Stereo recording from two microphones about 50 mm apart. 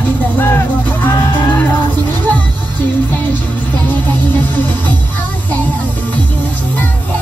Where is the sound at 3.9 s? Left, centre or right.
Left.